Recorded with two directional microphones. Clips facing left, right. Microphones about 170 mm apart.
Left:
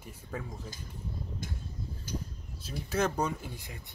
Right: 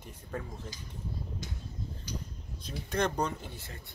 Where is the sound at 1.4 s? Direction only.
50° left (ahead or behind).